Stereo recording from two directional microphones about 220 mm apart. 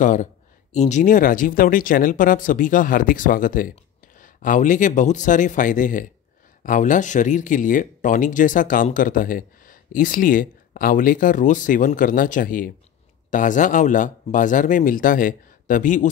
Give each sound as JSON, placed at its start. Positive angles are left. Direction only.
{"t": 0.0, "sound": "speech", "side_deg": 35}